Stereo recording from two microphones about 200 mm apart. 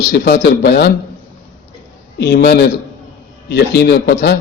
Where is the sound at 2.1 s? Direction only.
55° left (ahead or behind).